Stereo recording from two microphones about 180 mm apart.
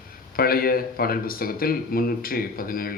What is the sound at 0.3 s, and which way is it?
Speech, 55° left (ahead or behind).